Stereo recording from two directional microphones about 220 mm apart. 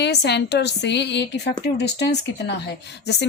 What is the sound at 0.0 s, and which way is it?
A woman's voice, 50° left (ahead or behind).